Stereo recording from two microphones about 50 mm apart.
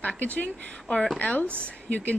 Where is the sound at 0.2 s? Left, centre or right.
Left.